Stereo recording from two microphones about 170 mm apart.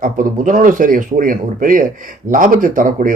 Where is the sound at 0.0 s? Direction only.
50° right (ahead or behind).